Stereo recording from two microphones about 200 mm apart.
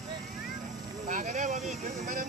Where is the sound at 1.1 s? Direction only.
40° right (ahead or behind).